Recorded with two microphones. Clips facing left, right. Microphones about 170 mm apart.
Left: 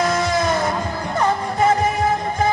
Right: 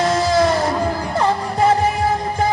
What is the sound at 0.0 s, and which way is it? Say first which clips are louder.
Music: right 3 dB; 30° right (ahead or behind).